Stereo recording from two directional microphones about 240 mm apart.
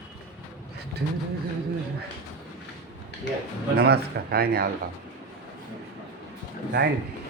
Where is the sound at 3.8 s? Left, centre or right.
Right.